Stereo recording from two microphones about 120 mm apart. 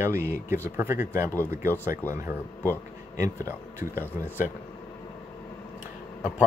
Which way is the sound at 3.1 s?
25° right (ahead or behind).